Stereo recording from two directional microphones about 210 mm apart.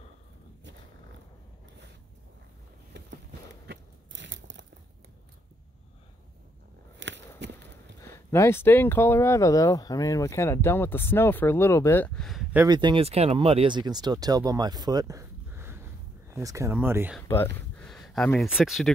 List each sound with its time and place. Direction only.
3.6 s biting: 55° right (ahead or behind)
7.0 s a sound: 60° right (ahead or behind)
8.0 s speech: 15° left (ahead or behind)
12.5 s speech: 20° right (ahead or behind)
17.7 s speech: centre (ahead or behind)